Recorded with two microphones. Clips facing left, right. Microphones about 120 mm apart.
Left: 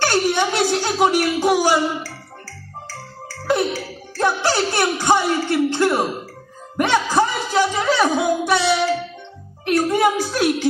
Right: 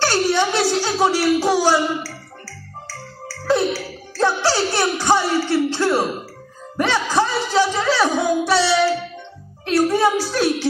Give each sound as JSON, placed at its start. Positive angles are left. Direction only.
{"t": 0.0, "sound": "a sound", "side_deg": 15}
{"t": 2.9, "sound": "music", "side_deg": 15}
{"t": 9.7, "sound": "music", "side_deg": 15}